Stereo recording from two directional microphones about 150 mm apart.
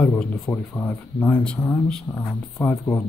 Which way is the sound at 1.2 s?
10° left (ahead or behind).